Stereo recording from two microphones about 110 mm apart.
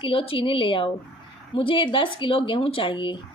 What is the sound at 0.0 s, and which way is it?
Speech, 55° left (ahead or behind).